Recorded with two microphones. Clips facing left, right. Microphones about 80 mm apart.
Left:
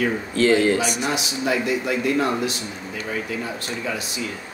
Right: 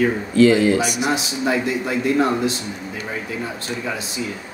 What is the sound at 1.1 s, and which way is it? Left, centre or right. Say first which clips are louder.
A man's voice: right 3 dB; right.